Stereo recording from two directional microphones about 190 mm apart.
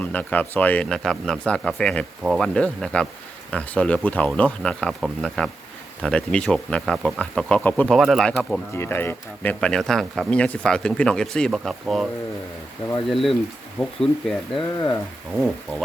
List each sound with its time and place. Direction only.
0.0 s speech: 10° left (ahead or behind)
2.2 s speech: 5° right (ahead or behind)
2.5 s speech: 5° left (ahead or behind)
8.7 s speech: 10° left (ahead or behind)
13.1 s speech: centre (ahead or behind)
14.5 s speech: 20° left (ahead or behind)